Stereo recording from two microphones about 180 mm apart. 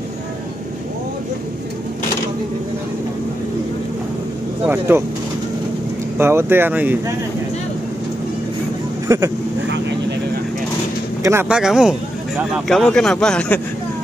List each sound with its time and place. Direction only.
4.6 s speech: 10° right (ahead or behind)
6.1 s speech: 15° right (ahead or behind)
9.0 s speech: 15° right (ahead or behind)
9.7 s vehicle: 75° right (ahead or behind)
11.2 s speech: 10° right (ahead or behind)